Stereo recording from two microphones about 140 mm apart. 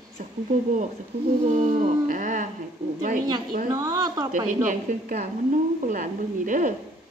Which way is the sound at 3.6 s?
25° right (ahead or behind).